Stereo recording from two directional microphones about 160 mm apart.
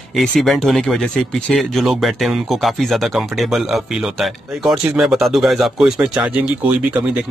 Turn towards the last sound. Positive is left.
turn(degrees=-10)  # may be behind; listen again after turning